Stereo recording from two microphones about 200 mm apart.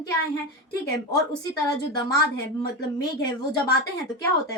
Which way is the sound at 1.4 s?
20° left (ahead or behind).